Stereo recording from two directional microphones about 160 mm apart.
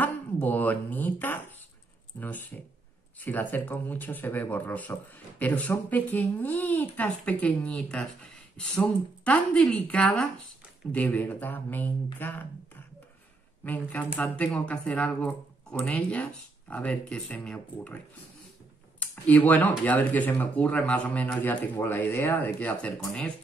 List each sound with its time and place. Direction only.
0.0 s speech: 10° left (ahead or behind)
13.7 s speech: 10° left (ahead or behind)
18.9 s speech: 10° left (ahead or behind)